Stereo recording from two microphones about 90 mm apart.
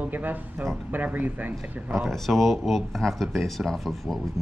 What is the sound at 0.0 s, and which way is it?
Speech, 20° right (ahead or behind).